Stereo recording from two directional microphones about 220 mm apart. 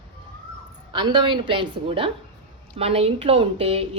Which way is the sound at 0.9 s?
20° right (ahead or behind).